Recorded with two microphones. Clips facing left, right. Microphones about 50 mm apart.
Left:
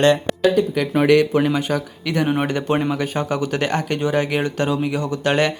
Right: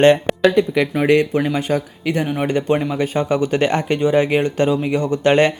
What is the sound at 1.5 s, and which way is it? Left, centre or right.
Speech, right.